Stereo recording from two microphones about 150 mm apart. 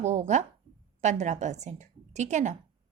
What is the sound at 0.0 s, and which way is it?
A woman's voice, 50° right (ahead or behind).